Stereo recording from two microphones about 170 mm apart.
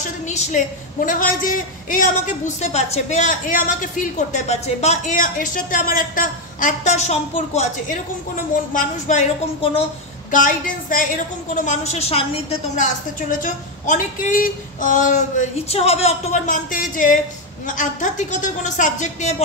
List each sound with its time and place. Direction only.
0.0 s a woman's voice: 45° left (ahead or behind)
10.3 s a woman's voice: 50° left (ahead or behind)